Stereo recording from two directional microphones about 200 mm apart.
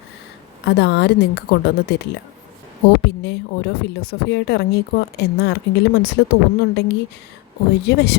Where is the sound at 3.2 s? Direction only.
55° left (ahead or behind).